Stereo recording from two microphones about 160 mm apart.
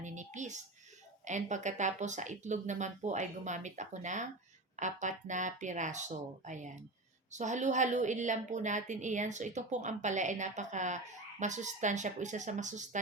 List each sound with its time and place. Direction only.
0.0 s whispering: 50° right (ahead or behind)
1.2 s a woman's voice: 50° right (ahead or behind)